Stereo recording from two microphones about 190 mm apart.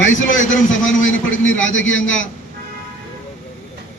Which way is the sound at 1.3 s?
90° left.